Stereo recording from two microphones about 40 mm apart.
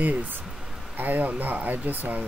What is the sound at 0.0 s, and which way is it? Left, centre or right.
Speech, right.